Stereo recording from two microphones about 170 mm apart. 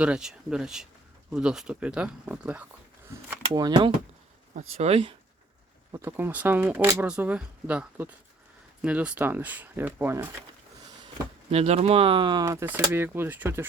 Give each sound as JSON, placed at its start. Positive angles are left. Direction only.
{"t": 0.0, "sound": "speech", "side_deg": -5}
{"t": 3.5, "sound": "speech", "side_deg": -25}
{"t": 4.5, "sound": "speech", "side_deg": -40}
{"t": 5.9, "sound": "speech", "side_deg": -15}
{"t": 11.5, "sound": "speech", "side_deg": -40}